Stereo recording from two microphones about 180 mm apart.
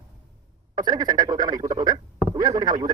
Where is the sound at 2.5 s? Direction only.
25° right (ahead or behind).